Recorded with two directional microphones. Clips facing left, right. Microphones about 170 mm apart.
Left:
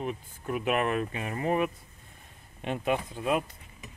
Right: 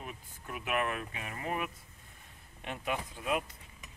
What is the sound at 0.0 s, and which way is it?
Speech, 30° left (ahead or behind).